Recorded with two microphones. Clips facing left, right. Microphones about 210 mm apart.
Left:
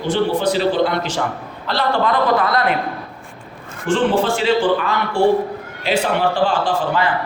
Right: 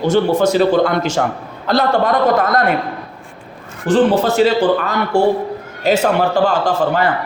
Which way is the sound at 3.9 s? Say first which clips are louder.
Right 4 dB; 40° right (ahead or behind).